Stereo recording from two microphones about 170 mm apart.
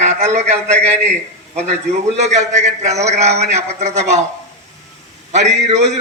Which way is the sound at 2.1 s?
45° right (ahead or behind).